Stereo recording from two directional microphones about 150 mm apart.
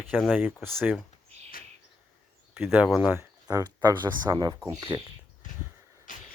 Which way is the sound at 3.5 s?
25° right (ahead or behind).